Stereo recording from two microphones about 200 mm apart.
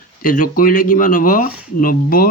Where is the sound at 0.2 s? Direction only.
45° left (ahead or behind).